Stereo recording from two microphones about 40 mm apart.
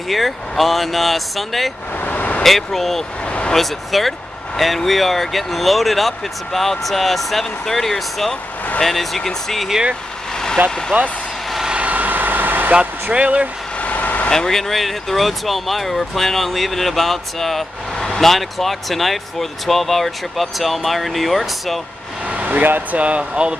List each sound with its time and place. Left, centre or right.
0.1 s speech: centre
2.0 s vehicle: left
2.4 s speech: centre
3.3 s vehicle: left
3.5 s speech: centre
10.3 s vehicle: centre
11.8 s vehicle: right
13.1 s speech: right
13.7 s vehicle: left
14.3 s speech: centre
22.4 s speech: right